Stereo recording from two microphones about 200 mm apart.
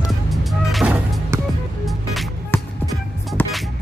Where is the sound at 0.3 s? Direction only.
Centre (ahead or behind).